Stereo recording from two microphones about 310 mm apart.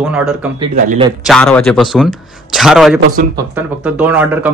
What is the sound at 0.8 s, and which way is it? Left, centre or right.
Speech, right.